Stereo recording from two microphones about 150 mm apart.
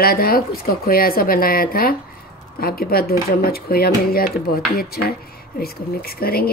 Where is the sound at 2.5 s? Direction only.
90° left.